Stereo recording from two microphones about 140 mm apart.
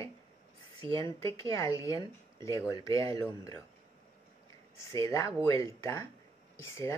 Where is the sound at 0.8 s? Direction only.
40° right (ahead or behind).